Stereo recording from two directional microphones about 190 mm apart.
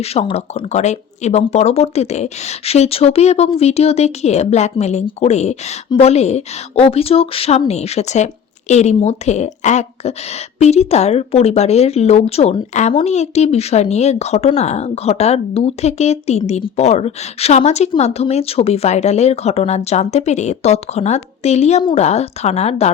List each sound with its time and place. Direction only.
0.0 s speech: 30° left (ahead or behind)